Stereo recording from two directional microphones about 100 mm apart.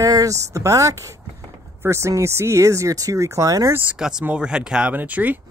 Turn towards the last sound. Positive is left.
turn(degrees=-15)  # may be behind; listen again after turning